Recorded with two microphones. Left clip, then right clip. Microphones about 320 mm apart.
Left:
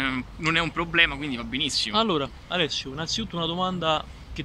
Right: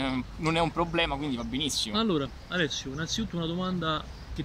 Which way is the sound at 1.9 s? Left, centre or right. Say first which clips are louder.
Left 5 dB; centre.